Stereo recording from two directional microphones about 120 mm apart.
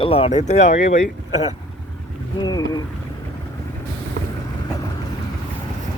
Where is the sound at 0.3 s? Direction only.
75° left (ahead or behind).